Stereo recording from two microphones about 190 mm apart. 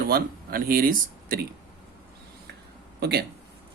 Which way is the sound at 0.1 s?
50° right (ahead or behind).